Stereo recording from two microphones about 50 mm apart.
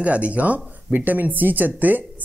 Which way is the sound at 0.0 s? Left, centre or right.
Right.